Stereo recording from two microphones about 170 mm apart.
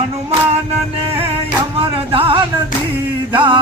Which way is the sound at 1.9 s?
30° right (ahead or behind).